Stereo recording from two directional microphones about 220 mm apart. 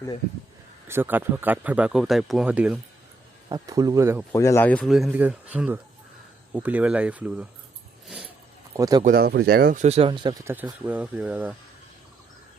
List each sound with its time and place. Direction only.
0.9 s speech: 10° right (ahead or behind)
3.5 s speech: 15° right (ahead or behind)
4.3 s speech: 10° left (ahead or behind); by 7.4 s 5° right (ahead or behind)
8.0 s a sound: 5° right (ahead or behind)
8.7 s speech: 15° right (ahead or behind)
9.0 s speech: 45° right (ahead or behind)
9.8 s speech: 25° right (ahead or behind); by 11.5 s 5° right (ahead or behind)